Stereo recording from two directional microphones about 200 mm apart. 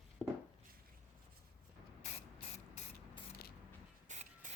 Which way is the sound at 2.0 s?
35° left (ahead or behind).